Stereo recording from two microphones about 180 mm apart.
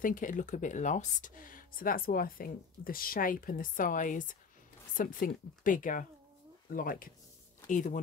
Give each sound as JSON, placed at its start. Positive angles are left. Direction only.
{"t": 0.0, "sound": "speech", "side_deg": 45}